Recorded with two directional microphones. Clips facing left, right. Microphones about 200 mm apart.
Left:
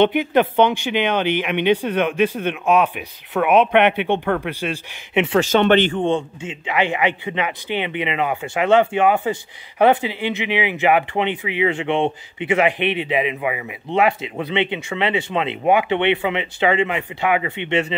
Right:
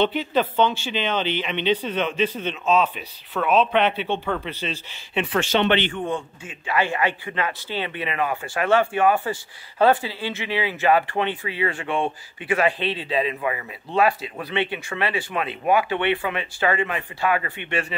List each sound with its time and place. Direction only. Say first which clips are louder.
0.0 s speech: left 5 dB; 15° left (ahead or behind)
3.5 s speech: left 5 dB; 65° left (ahead or behind)
3.9 s speech: left 5 dB; 15° left (ahead or behind)
5.4 s speech: left 5 dB; 45° left (ahead or behind)
6.0 s speech: left 7 dB; 25° left (ahead or behind)